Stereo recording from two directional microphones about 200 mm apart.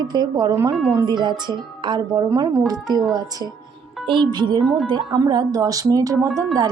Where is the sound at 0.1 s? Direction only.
20° right (ahead or behind).